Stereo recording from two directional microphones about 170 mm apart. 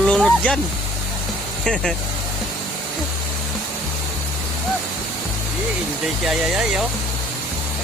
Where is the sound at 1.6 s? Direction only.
5° left (ahead or behind).